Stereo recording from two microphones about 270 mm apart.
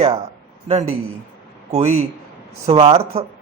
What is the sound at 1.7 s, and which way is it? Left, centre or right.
A man's voice, right.